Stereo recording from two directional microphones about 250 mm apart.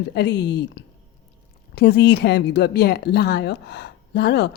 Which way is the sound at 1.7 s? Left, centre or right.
Left.